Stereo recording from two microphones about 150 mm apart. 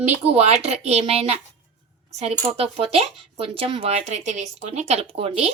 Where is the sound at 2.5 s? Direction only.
40° right (ahead or behind).